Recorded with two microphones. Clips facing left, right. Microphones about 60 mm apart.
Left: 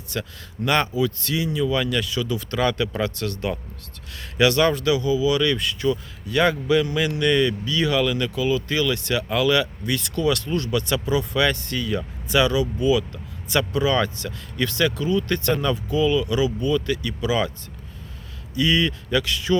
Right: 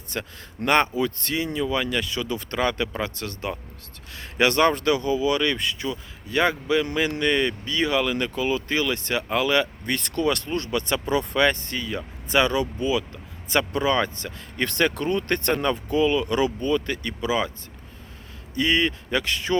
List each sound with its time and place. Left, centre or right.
0.1 s speech: right
1.5 s speech: right
14.6 s speech: right
18.5 s speech: right